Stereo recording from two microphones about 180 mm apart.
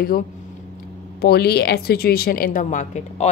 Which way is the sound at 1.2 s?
60° left (ahead or behind).